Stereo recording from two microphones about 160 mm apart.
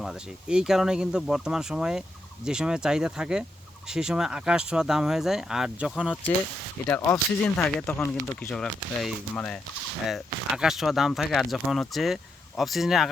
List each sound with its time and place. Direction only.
0.0 s speech: 5° right (ahead or behind)
6.8 s speech: 15° left (ahead or behind)
7.9 s speech: 15° left (ahead or behind)
8.4 s speech: centre (ahead or behind)
10.5 s speech: 5° right (ahead or behind)